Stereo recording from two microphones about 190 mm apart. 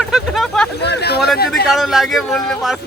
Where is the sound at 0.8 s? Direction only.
60° left (ahead or behind).